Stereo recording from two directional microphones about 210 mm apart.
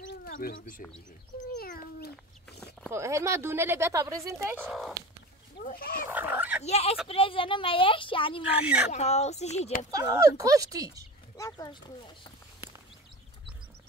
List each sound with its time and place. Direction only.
0.0 s bird: 50° left (ahead or behind)
1.5 s cat: 45° left (ahead or behind)
2.9 s speech: 15° right (ahead or behind)
4.6 s speech: centre (ahead or behind)
5.6 s speech: 45° left (ahead or behind)
6.0 s speech: 10° right (ahead or behind)
6.6 s speech: 30° left (ahead or behind)
9.8 s speech: 15° right (ahead or behind)
11.3 s speech: 15° left (ahead or behind)